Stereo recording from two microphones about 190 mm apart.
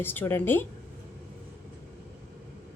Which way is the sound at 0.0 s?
10° left (ahead or behind).